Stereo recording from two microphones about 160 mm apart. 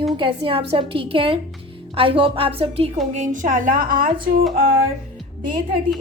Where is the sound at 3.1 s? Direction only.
50° right (ahead or behind).